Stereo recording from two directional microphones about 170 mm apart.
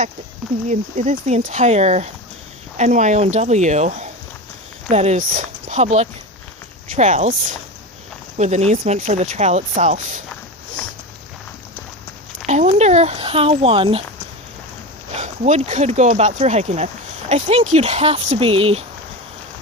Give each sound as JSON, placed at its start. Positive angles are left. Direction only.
{"t": 0.7, "sound": "speech", "side_deg": -45}
{"t": 8.4, "sound": "speech", "side_deg": -40}
{"t": 12.5, "sound": "speech", "side_deg": -40}
{"t": 15.1, "sound": "speech", "side_deg": -45}